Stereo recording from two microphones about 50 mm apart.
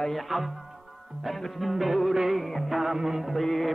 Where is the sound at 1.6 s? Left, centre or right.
Centre.